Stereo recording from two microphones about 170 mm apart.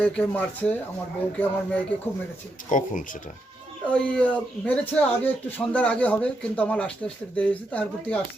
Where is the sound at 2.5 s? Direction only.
50° left (ahead or behind).